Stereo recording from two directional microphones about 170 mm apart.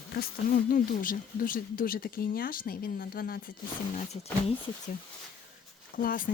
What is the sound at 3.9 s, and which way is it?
Speech, 40° left (ahead or behind).